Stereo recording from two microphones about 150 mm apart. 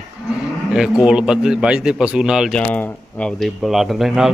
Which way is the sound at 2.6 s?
10° left (ahead or behind).